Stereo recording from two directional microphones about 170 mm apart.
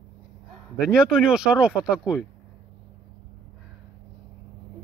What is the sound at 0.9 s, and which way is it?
Speech, centre (ahead or behind).